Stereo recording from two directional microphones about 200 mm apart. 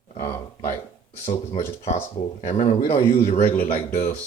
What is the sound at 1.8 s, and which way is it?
Speech, 35° left (ahead or behind).